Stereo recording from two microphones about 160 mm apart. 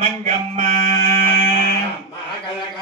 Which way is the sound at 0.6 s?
45° right (ahead or behind).